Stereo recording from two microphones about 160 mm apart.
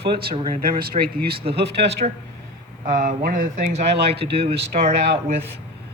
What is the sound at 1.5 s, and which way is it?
Speech, 90° right.